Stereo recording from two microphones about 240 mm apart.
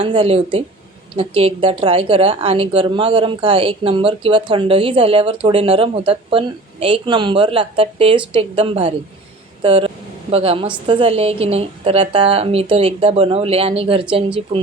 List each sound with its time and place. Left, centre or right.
0.0 s a woman's voice: right